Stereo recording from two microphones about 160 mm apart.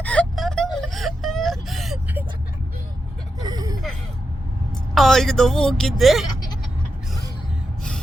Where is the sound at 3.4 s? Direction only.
25° right (ahead or behind).